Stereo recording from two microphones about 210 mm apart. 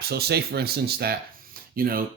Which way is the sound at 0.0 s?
50° right (ahead or behind).